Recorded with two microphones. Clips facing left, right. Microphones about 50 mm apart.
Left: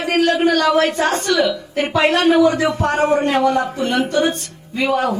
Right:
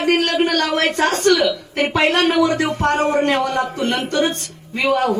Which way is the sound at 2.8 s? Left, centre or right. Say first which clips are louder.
Left 1 dB; centre.